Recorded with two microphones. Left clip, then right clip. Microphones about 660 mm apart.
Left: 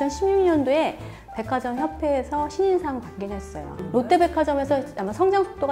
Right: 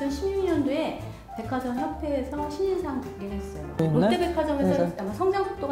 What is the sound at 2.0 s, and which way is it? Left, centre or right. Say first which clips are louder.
Speech: left 8 dB; left.